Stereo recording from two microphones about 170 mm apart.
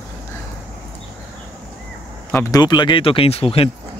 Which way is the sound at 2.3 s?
15° left (ahead or behind).